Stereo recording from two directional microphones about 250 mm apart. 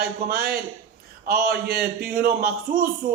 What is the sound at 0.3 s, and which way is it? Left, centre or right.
A man's voice, right.